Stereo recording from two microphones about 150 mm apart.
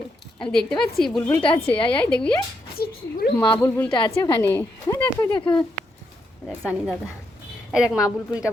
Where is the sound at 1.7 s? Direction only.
35° left (ahead or behind).